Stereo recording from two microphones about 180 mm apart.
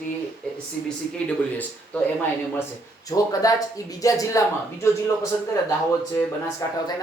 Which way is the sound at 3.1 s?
15° left (ahead or behind).